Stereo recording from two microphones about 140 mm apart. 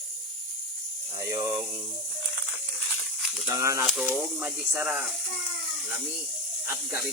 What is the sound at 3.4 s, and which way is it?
Speech, 20° right (ahead or behind).